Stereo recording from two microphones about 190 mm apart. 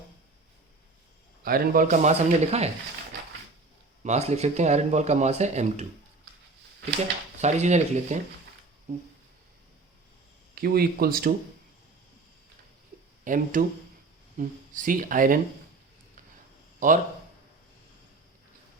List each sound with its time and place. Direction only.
1.5 s speech: 50° right (ahead or behind)
4.0 s speech: 35° right (ahead or behind)
7.3 s speech: 35° right (ahead or behind)
10.5 s speech: 55° right (ahead or behind)
13.2 s speech: 45° right (ahead or behind)
16.8 s speech: 45° right (ahead or behind)